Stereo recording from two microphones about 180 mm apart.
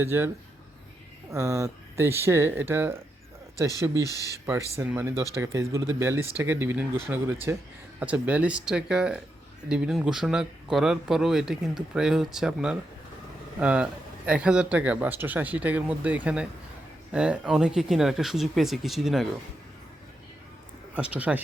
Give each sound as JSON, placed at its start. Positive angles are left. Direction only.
{"t": 0.0, "sound": "speech", "side_deg": -10}
{"t": 1.3, "sound": "speech", "side_deg": -15}
{"t": 4.0, "sound": "speech", "side_deg": 20}
{"t": 4.8, "sound": "speech", "side_deg": -15}
{"t": 20.9, "sound": "speech", "side_deg": -5}